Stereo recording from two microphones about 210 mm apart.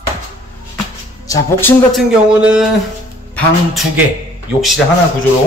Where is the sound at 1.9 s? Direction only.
5° right (ahead or behind).